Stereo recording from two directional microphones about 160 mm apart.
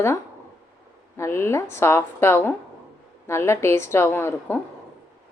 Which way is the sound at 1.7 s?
15° left (ahead or behind).